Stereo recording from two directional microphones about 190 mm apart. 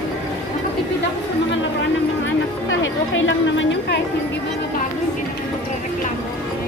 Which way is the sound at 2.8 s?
90° left.